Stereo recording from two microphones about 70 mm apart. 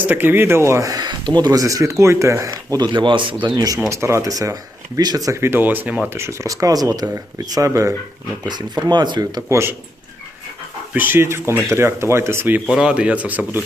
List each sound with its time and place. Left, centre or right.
0.0 s speech: right
0.9 s speech: right
3.8 s speech: right
5.4 s speech: right
6.1 s speech: right
7.5 s speech: right
8.4 s speech: right
9.5 s speech: right
10.9 s speech: right
12.7 s speech: centre